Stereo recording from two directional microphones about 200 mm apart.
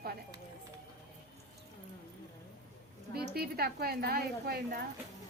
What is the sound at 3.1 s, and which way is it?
A woman's voice, 50° right (ahead or behind).